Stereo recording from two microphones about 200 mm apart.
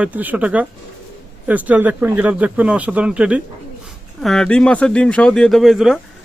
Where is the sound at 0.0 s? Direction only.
10° right (ahead or behind).